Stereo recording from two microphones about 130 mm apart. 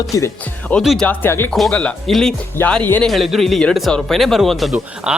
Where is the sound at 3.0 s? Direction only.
Centre (ahead or behind).